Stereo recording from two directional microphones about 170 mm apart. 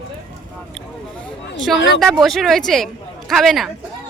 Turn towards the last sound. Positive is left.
turn(degrees=0)  # may be behind; listen again after turning